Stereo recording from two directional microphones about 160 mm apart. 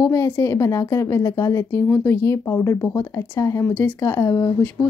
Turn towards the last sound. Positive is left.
turn(degrees=15)  # may be behind; listen again after turning